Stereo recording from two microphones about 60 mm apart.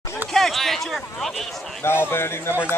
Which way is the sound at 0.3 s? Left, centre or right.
Centre.